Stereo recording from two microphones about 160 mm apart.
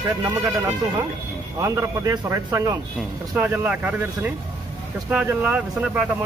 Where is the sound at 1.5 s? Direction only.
20° right (ahead or behind).